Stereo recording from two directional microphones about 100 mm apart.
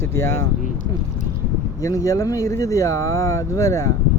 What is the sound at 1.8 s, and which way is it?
Speech, 35° left (ahead or behind).